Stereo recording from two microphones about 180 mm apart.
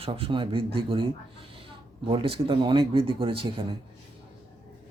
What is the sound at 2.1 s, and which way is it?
Speech, 30° right (ahead or behind).